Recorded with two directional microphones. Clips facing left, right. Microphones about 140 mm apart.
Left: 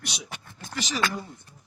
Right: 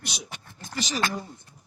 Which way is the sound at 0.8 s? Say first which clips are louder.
Right 1 dB; 40° right (ahead or behind).